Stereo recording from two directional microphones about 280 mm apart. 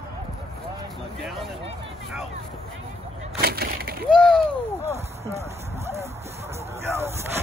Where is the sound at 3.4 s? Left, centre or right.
Right.